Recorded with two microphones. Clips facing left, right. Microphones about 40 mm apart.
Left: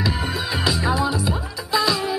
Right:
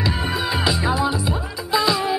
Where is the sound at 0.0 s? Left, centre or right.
Centre.